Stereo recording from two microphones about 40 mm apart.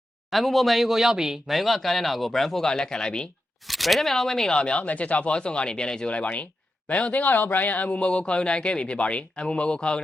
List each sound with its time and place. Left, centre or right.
0.3 s speech: centre
1.5 s speech: centre
2.6 s speech: centre
3.7 s speech: centre
4.6 s speech: left
6.1 s speech: left
7.9 s speech: left